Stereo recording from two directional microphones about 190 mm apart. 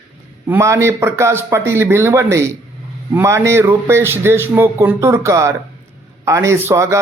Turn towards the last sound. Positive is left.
turn(degrees=-15)  # may be behind; listen again after turning